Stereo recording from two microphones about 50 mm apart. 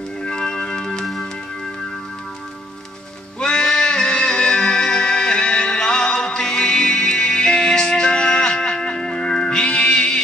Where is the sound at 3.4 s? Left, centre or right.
Centre.